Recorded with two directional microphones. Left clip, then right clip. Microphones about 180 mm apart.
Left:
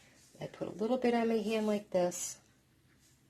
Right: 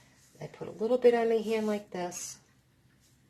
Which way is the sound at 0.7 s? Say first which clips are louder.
Right 7 dB; 50° left (ahead or behind).